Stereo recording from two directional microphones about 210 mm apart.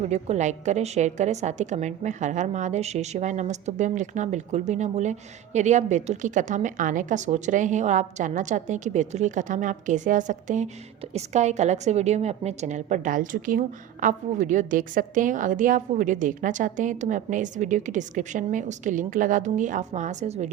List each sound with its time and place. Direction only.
0.1 s a woman's voice: 35° right (ahead or behind)